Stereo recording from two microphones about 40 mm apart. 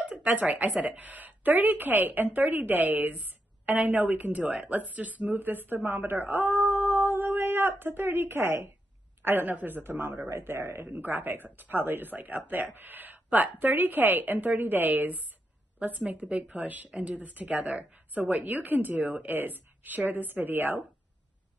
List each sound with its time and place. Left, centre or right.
0.2 s a woman's voice: right
9.2 s a man's voice: right
11.1 s a woman's voice: right
16.1 s a woman's voice: right
18.3 s a woman's voice: right
19.3 s a woman's voice: right